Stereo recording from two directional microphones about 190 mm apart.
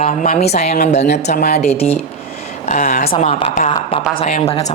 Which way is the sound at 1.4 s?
55° left (ahead or behind).